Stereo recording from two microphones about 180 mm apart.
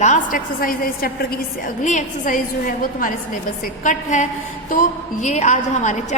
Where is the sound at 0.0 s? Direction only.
45° left (ahead or behind).